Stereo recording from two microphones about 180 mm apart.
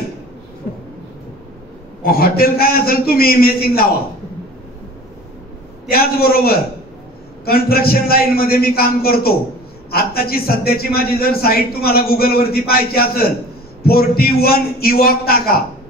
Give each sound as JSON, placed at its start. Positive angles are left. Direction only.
{"t": 2.0, "sound": "a man's voice", "side_deg": 55}
{"t": 5.9, "sound": "a man's voice", "side_deg": 55}